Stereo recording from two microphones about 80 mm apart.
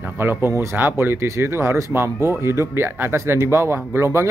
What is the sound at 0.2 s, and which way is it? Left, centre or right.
A man's voice, right.